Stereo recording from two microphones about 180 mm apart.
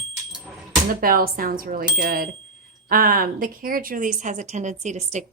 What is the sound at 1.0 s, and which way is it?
A woman's voice, 50° right (ahead or behind).